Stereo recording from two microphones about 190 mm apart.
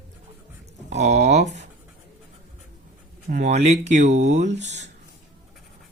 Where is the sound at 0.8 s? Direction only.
35° right (ahead or behind).